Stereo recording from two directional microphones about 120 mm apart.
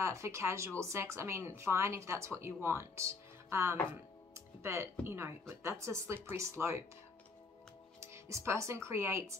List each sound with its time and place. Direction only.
0.0 s speech: 25° right (ahead or behind)
4.3 s music: 20° right (ahead or behind)
5.0 s speech: 20° right (ahead or behind)
8.0 s speech: 25° right (ahead or behind)